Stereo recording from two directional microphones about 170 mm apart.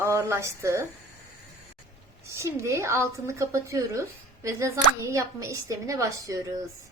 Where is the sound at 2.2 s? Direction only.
15° right (ahead or behind).